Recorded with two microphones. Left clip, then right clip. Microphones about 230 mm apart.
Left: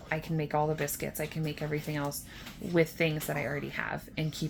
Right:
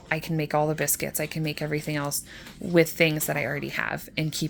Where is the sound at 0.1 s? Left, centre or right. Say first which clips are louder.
Right 6 dB; right.